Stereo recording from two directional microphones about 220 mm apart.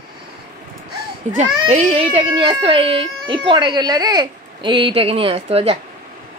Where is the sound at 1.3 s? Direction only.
30° right (ahead or behind).